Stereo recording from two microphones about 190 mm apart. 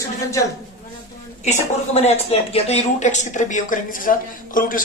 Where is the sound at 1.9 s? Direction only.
35° left (ahead or behind).